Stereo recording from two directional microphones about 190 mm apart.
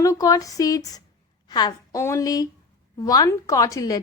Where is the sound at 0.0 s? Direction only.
15° left (ahead or behind).